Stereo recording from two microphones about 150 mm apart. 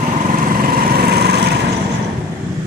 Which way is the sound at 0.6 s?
90° right.